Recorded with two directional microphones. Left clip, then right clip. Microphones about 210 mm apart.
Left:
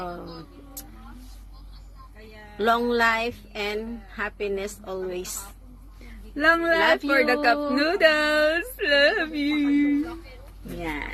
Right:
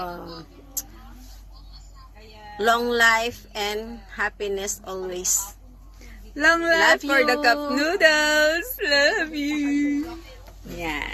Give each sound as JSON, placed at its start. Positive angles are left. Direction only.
{"t": 0.0, "sound": "speech", "side_deg": 15}
{"t": 2.6, "sound": "speech", "side_deg": 15}
{"t": 6.3, "sound": "speech", "side_deg": 20}